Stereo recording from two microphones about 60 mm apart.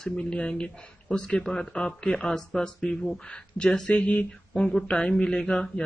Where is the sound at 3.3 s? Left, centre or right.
Centre.